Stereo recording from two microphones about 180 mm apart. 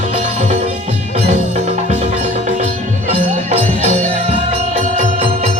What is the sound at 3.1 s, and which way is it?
Music, 35° right (ahead or behind).